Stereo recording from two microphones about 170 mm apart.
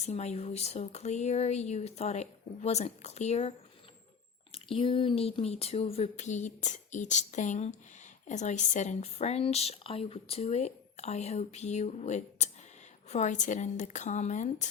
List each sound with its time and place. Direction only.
0.0 s speech: 40° left (ahead or behind)
4.5 s a woman's voice: 30° left (ahead or behind)